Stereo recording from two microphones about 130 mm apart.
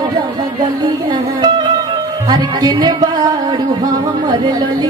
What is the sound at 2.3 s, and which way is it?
Speech, 30° right (ahead or behind).